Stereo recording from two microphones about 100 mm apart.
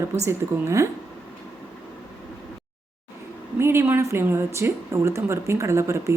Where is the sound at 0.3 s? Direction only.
30° right (ahead or behind).